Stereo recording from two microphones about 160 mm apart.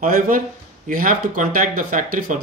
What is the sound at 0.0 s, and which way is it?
Speech, 60° right (ahead or behind).